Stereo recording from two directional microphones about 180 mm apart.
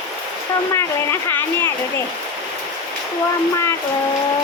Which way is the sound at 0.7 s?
15° left (ahead or behind).